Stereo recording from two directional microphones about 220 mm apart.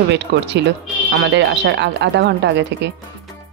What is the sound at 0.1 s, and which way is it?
Speech, 50° right (ahead or behind).